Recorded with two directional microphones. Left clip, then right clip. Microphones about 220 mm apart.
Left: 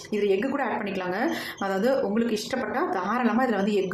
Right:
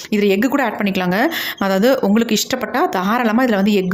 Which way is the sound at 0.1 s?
45° right (ahead or behind).